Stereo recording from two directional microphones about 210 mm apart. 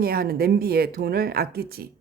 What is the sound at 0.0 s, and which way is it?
Speech, 45° right (ahead or behind).